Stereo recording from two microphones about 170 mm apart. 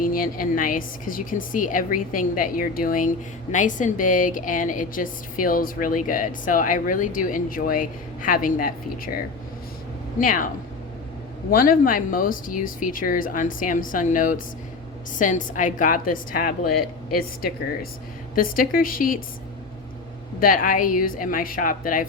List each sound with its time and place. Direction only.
0.0 s a woman's voice: 55° left (ahead or behind)
10.2 s a woman's voice: 55° left (ahead or behind)
11.5 s a woman's voice: 55° left (ahead or behind)
20.4 s a woman's voice: 55° left (ahead or behind)